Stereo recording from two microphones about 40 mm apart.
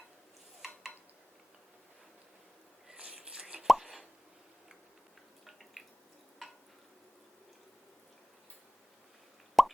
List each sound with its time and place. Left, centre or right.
0.6 s a sound: centre
2.9 s plop: right; by 4.0 s centre
5.8 s drip: centre
9.6 s plop: centre